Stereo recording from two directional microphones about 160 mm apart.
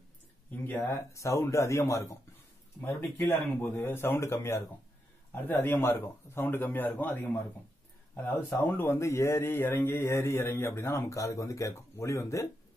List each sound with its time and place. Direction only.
0.5 s a man's voice: 10° left (ahead or behind)